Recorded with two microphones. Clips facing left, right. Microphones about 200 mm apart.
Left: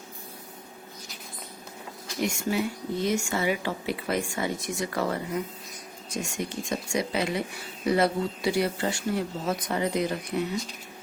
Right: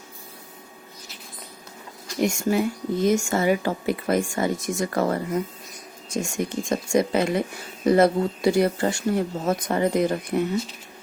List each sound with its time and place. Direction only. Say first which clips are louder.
2.2 s speech: right 5 dB; 45° right (ahead or behind)